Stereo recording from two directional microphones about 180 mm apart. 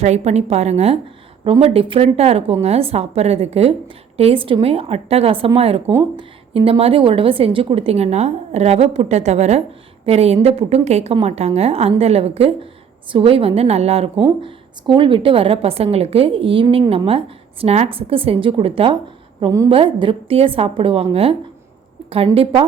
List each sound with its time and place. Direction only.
0.0 s a woman's voice: 40° right (ahead or behind)